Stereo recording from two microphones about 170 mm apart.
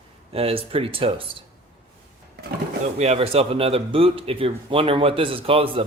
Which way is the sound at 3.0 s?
40° right (ahead or behind).